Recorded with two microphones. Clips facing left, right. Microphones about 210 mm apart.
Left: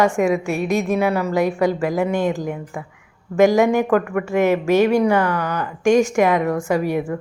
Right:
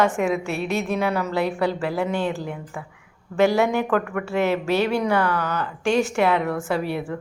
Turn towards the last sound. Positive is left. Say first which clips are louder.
# left 5 dB
turn(degrees=15)  # may be behind; listen again after turning